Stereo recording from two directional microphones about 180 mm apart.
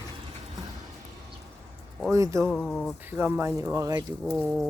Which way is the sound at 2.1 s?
15° right (ahead or behind).